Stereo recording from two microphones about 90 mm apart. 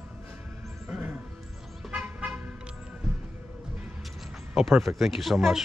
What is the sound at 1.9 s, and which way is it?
Toot, 15° right (ahead or behind).